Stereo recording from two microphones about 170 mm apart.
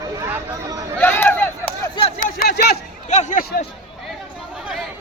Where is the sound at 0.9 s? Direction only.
10° left (ahead or behind).